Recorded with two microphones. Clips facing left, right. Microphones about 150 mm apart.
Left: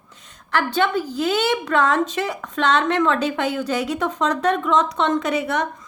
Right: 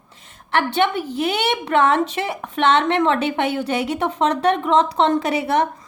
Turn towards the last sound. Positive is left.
turn(degrees=-30)  # may be behind; listen again after turning